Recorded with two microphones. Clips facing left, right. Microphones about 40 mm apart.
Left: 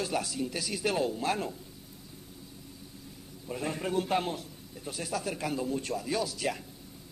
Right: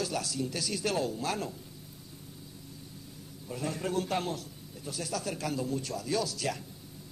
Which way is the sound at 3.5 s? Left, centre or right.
Left.